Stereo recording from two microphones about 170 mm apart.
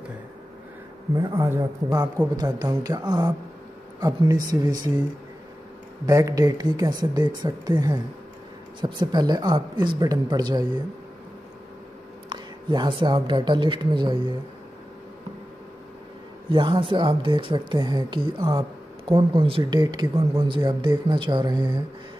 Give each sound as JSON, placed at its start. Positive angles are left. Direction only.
{"t": 1.1, "sound": "speech", "side_deg": -20}
{"t": 6.0, "sound": "speech", "side_deg": -20}
{"t": 12.3, "sound": "a woman's voice", "side_deg": -25}
{"t": 16.4, "sound": "speech", "side_deg": -30}